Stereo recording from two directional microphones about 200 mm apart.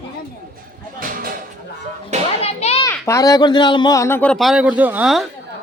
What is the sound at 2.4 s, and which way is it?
Children playing, 30° left (ahead or behind).